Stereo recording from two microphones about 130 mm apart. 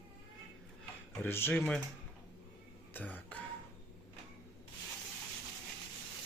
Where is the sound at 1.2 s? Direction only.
15° left (ahead or behind).